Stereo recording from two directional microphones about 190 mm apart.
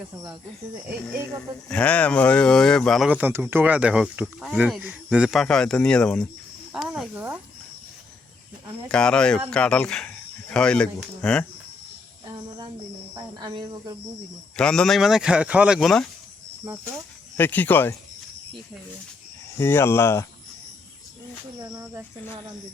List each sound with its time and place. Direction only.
1.7 s speech: 5° left (ahead or behind)
6.7 s cricket: centre (ahead or behind)
8.9 s speech: 5° left (ahead or behind)
12.2 s a sound: 20° right (ahead or behind)
13.4 s speech: 20° right (ahead or behind)
14.5 s speech: 5° left (ahead or behind)
17.3 s speech: 10° left (ahead or behind)
19.5 s speech: 15° left (ahead or behind)